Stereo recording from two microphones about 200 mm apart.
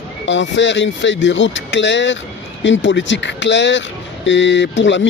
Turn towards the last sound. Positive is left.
turn(degrees=65)  # may be behind; listen again after turning